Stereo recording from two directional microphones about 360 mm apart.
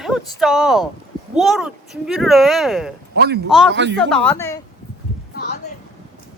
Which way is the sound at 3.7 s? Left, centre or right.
Right.